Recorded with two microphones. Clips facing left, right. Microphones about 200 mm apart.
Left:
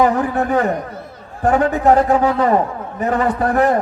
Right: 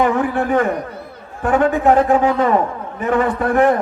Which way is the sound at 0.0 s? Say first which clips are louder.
Left 1 dB; 40° left (ahead or behind).